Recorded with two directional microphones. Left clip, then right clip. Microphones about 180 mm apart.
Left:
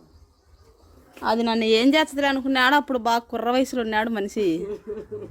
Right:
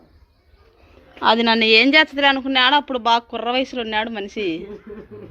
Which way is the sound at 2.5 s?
45° left (ahead or behind).